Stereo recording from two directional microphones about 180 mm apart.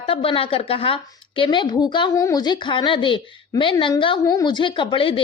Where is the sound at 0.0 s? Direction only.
30° left (ahead or behind).